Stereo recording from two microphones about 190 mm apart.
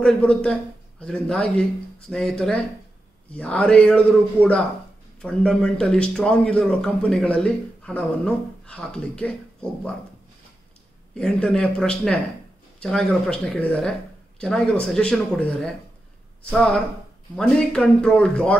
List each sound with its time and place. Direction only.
0.0 s speech: 5° left (ahead or behind)
11.1 s speech: 5° left (ahead or behind)